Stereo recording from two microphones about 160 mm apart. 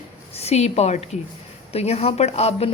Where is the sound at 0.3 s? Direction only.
40° left (ahead or behind).